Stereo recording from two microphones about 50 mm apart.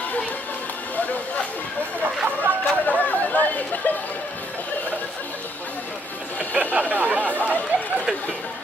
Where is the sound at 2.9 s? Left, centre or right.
Left.